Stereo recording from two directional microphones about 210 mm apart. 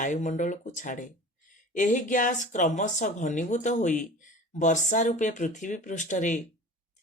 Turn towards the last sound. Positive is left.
turn(degrees=35)  # may be behind; listen again after turning